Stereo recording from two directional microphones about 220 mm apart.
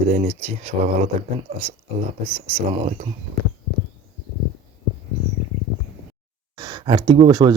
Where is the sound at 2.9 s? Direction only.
35° right (ahead or behind).